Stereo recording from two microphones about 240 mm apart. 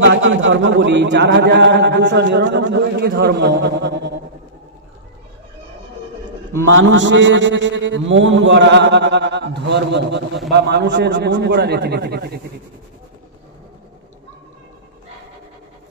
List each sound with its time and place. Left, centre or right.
0.0 s a man's voice: right
6.7 s a man's voice: right